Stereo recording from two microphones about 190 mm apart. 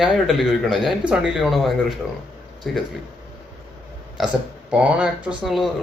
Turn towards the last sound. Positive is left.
turn(degrees=0)  # may be behind; listen again after turning